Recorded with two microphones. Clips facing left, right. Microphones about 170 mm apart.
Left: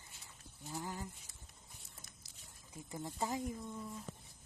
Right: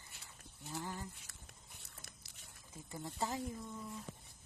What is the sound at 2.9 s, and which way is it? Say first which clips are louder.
Speech: left 1 dB; 20° left (ahead or behind).